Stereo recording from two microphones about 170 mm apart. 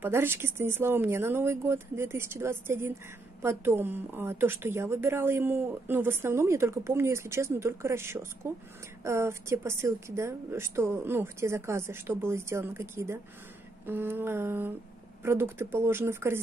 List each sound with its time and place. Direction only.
0.0 s a woman's voice: 15° right (ahead or behind)